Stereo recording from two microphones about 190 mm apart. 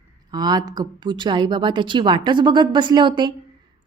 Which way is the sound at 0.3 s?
20° right (ahead or behind).